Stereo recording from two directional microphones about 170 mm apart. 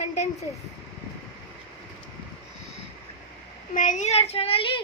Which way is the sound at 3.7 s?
45° left (ahead or behind).